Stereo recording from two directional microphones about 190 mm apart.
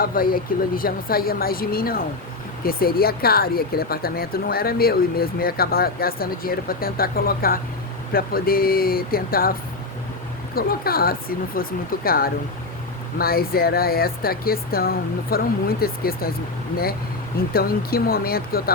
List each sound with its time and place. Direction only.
0.0 s speech: 50° left (ahead or behind)
17.5 s speech: 50° left (ahead or behind)